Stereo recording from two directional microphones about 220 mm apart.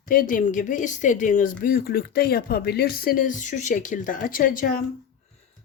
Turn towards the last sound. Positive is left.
turn(degrees=40)  # may be behind; listen again after turning